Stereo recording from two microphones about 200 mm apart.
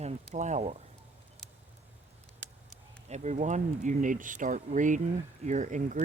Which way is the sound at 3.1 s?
35° right (ahead or behind).